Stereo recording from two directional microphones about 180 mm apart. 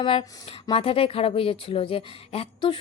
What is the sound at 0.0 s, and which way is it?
A woman's voice, 30° left (ahead or behind).